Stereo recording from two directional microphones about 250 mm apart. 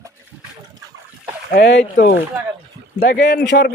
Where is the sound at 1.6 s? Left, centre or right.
Left.